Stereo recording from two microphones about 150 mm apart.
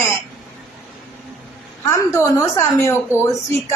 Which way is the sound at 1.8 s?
20° left (ahead or behind).